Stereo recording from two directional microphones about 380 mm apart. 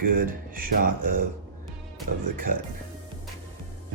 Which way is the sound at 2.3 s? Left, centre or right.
Right.